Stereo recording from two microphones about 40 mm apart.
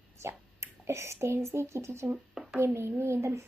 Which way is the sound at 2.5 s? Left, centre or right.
Right.